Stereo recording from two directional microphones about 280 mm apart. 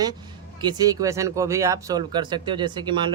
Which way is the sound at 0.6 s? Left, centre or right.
Centre.